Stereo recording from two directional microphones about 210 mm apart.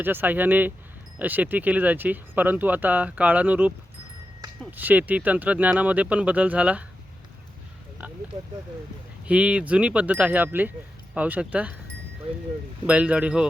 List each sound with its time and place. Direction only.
0.0 s speech: 10° right (ahead or behind)
4.8 s speech: 10° right (ahead or behind)
8.3 s speech: 30° right (ahead or behind)
9.2 s speech: 5° right (ahead or behind)
12.9 s speech: 5° right (ahead or behind)